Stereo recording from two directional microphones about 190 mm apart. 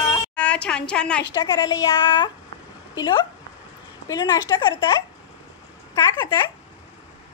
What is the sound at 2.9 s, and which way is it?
A woman's voice, 20° left (ahead or behind).